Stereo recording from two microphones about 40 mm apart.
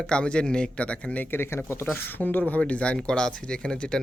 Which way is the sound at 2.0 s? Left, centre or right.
Left.